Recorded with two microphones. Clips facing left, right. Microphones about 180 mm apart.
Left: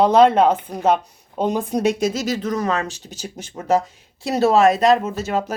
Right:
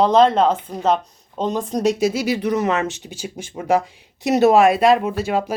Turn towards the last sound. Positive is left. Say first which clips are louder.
# even
turn(degrees=-10)  # may be behind; listen again after turning